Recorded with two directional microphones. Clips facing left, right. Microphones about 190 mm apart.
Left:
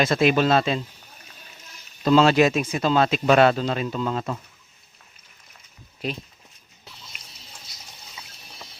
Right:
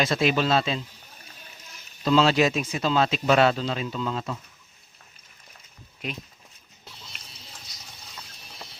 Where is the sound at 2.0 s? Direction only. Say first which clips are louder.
Left 3 dB; 50° left (ahead or behind).